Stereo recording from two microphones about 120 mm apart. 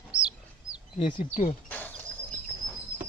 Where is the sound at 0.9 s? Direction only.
45° left (ahead or behind).